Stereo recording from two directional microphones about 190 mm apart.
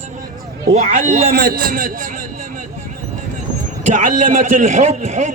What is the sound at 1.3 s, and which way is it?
Speech, 50° right (ahead or behind).